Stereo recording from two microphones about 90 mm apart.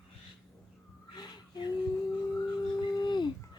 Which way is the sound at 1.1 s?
50° left (ahead or behind).